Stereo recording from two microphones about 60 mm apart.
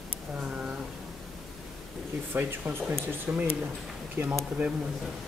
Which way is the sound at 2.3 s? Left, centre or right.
Right.